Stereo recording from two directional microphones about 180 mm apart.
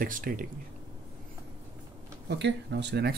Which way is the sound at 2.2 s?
70° right (ahead or behind).